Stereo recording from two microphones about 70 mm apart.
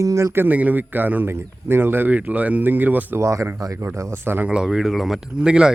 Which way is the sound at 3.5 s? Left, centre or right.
Right.